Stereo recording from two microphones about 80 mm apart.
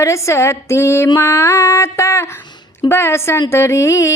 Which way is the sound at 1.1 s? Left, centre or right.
Left.